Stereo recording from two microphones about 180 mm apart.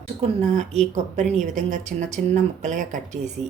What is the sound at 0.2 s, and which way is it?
A woman's voice, 40° right (ahead or behind).